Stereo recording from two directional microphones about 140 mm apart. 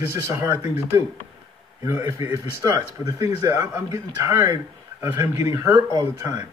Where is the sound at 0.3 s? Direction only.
25° right (ahead or behind).